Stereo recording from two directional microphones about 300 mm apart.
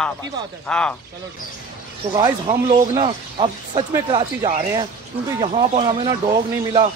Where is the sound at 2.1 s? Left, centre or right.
Centre.